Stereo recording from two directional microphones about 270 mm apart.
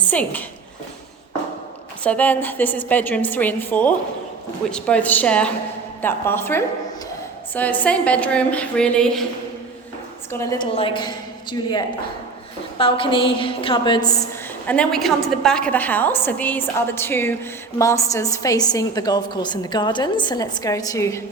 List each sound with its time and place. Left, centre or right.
0.0 s a woman's voice: centre
2.0 s a woman's voice: centre
10.3 s a woman's voice: centre
12.8 s a woman's voice: centre
14.7 s a woman's voice: centre